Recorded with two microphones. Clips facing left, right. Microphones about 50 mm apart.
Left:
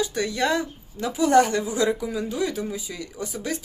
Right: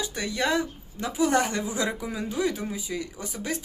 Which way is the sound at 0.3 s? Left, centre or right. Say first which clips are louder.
Even; centre.